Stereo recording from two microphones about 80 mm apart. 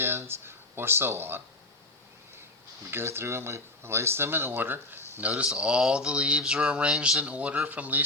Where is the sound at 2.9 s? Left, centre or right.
Right.